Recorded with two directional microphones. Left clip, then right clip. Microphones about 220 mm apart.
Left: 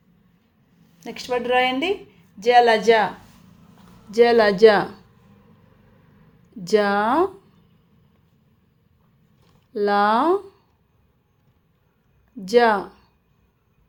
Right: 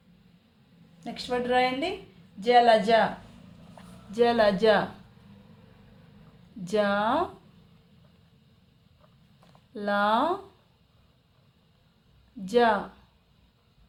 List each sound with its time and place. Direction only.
0.9 s speech: 30° left (ahead or behind)
4.1 s speech: 30° left (ahead or behind)
6.7 s speech: 30° left (ahead or behind)
9.7 s speech: 30° left (ahead or behind)
12.5 s speech: 30° left (ahead or behind)